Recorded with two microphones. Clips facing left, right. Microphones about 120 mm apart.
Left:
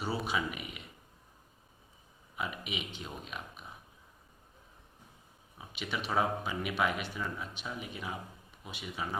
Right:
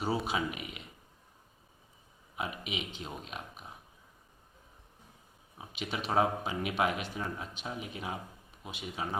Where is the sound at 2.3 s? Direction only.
30° right (ahead or behind).